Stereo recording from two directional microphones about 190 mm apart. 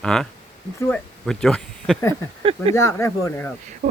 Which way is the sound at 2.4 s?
30° right (ahead or behind).